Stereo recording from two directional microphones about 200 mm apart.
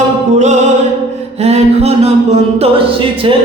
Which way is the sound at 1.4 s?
35° right (ahead or behind).